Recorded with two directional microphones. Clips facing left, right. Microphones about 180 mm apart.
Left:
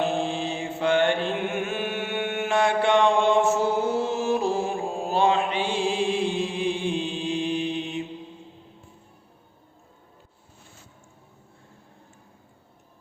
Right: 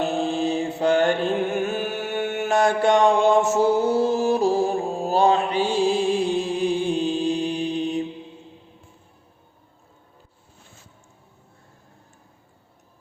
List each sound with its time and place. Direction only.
0.0 s mantra: 40° right (ahead or behind)